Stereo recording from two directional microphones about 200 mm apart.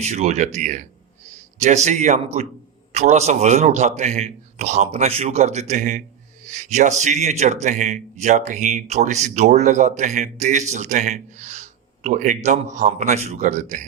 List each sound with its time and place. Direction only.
0.0 s a man's voice: 35° right (ahead or behind)